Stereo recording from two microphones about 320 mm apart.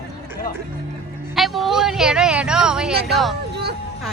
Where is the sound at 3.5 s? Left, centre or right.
Right.